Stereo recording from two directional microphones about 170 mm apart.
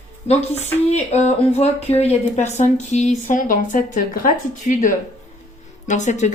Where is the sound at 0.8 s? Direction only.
40° left (ahead or behind).